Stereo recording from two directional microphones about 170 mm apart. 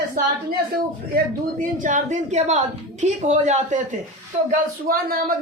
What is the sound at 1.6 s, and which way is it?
A woman's voice, 50° right (ahead or behind).